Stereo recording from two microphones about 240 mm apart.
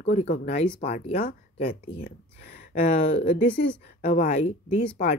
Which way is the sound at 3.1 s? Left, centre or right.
Left.